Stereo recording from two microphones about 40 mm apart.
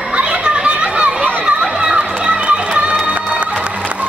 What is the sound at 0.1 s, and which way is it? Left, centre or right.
Chatter, right.